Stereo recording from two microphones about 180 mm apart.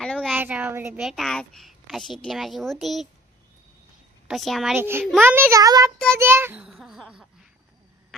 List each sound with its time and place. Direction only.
0.0 s a sound: 5° left (ahead or behind)
0.3 s a child's voice: 10° right (ahead or behind)
0.9 s a child's voice: centre (ahead or behind)
4.3 s a child's voice: centre (ahead or behind)
4.8 s a child's voice: 15° right (ahead or behind)